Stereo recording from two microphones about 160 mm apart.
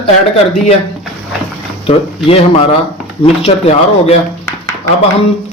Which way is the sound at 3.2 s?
40° left (ahead or behind).